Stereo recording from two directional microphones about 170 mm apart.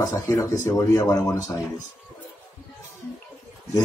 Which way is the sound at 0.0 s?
20° left (ahead or behind).